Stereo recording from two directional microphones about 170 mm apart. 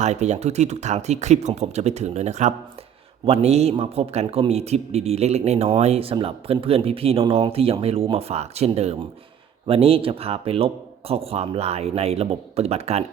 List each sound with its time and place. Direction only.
0.0 s speech: 40° right (ahead or behind)